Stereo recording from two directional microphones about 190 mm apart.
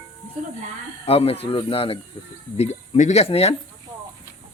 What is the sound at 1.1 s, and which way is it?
Speech, 30° left (ahead or behind).